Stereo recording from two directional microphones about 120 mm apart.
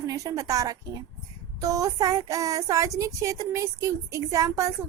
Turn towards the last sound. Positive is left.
turn(degrees=-25)  # may be behind; listen again after turning